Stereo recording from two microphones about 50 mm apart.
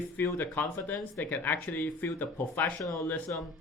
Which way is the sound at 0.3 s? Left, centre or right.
Left.